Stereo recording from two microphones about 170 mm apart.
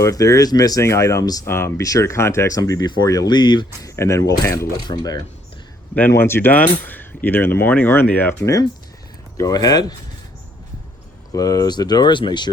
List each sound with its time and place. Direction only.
0.0 s speech: 20° left (ahead or behind)
3.8 s speech: 15° left (ahead or behind)
6.1 s speech: 15° left (ahead or behind)
11.3 s speech: 20° left (ahead or behind)